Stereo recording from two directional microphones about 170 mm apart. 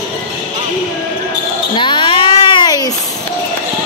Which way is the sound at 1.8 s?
30° left (ahead or behind).